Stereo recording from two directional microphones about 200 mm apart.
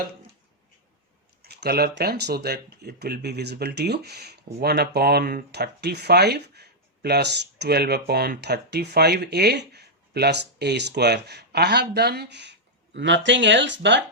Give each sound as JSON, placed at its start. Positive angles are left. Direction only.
{"t": 1.4, "sound": "speech", "side_deg": -55}